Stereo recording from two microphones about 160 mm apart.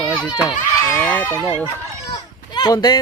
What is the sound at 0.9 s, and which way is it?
Speech, 10° left (ahead or behind).